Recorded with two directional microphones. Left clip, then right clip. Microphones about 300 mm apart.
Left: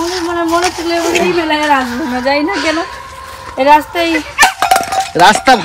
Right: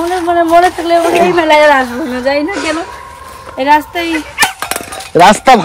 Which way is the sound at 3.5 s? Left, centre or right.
Centre.